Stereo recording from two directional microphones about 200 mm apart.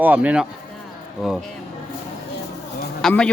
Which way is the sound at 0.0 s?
5° right (ahead or behind).